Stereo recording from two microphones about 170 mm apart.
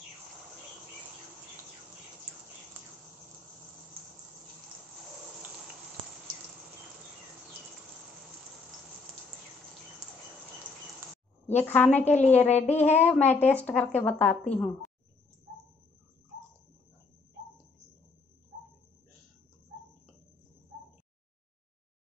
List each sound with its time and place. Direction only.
11.5 s a woman's voice: 10° left (ahead or behind)
12.4 s child singing: 40° left (ahead or behind)
12.7 s a woman's voice: 10° left (ahead or behind)